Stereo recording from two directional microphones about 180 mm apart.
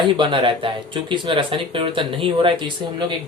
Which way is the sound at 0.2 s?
25° right (ahead or behind).